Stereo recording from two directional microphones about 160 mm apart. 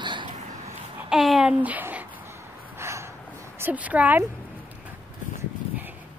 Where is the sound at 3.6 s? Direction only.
10° right (ahead or behind).